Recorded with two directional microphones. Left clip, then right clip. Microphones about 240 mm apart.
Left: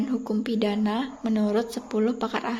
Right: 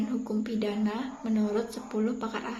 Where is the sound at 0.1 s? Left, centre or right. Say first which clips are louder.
Left 5 dB; left.